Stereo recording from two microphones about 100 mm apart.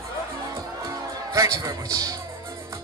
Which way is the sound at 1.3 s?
35° right (ahead or behind).